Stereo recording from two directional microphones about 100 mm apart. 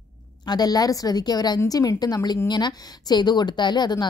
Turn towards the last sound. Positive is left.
turn(degrees=45)  # may be behind; listen again after turning